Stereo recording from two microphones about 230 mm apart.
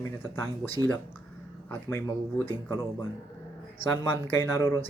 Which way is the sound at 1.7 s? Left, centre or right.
Centre.